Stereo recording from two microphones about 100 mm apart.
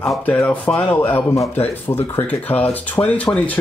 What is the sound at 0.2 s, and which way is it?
Speech, 15° left (ahead or behind).